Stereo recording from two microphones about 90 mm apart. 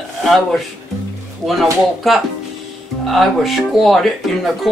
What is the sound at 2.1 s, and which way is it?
Speech, centre (ahead or behind).